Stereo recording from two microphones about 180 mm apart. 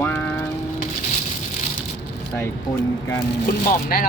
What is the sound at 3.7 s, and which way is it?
Speech, 55° left (ahead or behind).